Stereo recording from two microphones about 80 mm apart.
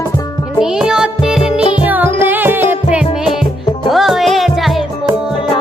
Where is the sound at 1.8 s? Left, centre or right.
Right.